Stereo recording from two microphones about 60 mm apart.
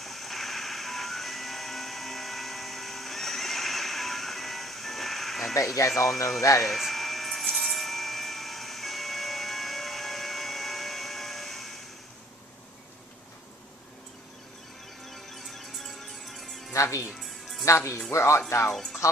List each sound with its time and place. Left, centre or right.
0.0 s printer: centre
6.6 s a sound: centre
15.1 s music: centre
16.7 s music: left
17.7 s speech: left
18.7 s speech: centre